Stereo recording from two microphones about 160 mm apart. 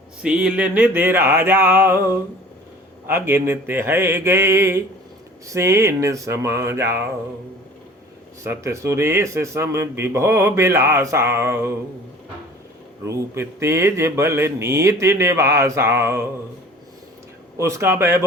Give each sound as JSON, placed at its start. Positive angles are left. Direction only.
{"t": 0.2, "sound": "speech", "side_deg": -5}
{"t": 8.4, "sound": "speech", "side_deg": -20}
{"t": 13.1, "sound": "speech", "side_deg": -20}
{"t": 17.6, "sound": "speech", "side_deg": -15}